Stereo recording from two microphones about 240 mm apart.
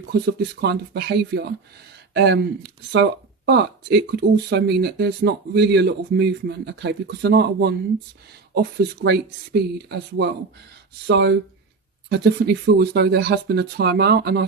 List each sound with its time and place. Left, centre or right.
0.1 s speech: right